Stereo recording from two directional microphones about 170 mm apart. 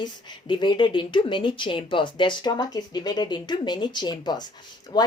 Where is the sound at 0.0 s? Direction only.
25° left (ahead or behind).